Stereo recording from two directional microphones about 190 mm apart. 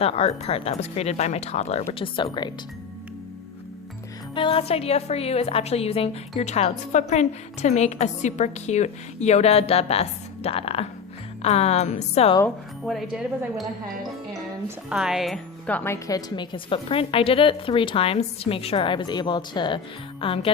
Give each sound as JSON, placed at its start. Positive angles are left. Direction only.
{"t": 0.0, "sound": "a woman's voice", "side_deg": 30}
{"t": 4.4, "sound": "a woman's voice", "side_deg": 30}
{"t": 12.8, "sound": "speech", "side_deg": 0}
{"t": 14.8, "sound": "a woman's voice", "side_deg": -5}